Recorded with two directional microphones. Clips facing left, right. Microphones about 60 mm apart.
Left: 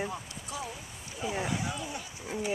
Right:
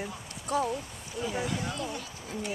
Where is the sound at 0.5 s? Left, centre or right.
Right.